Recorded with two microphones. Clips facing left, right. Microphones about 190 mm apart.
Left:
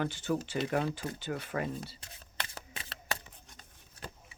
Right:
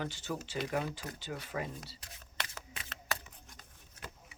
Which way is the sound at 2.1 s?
30° left (ahead or behind).